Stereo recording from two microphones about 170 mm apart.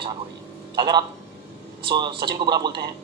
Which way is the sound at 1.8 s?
25° right (ahead or behind).